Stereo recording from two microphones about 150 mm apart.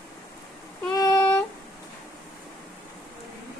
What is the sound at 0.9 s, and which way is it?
Child singing, 25° left (ahead or behind).